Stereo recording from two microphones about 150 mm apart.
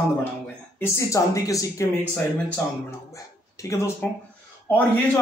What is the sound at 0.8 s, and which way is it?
A man's voice, 20° left (ahead or behind).